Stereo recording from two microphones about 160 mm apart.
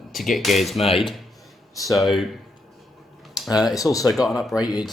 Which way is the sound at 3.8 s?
20° left (ahead or behind).